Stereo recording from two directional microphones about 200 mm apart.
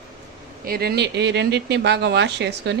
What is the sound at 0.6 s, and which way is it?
Speech, 50° right (ahead or behind).